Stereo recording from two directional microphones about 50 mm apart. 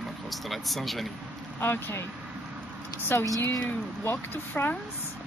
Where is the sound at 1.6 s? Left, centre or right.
Left.